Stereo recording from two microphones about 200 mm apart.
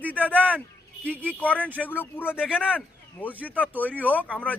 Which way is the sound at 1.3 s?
5° left (ahead or behind).